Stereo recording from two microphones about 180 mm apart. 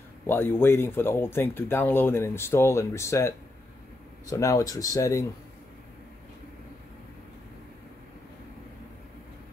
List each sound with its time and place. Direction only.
0.3 s speech: 10° left (ahead or behind)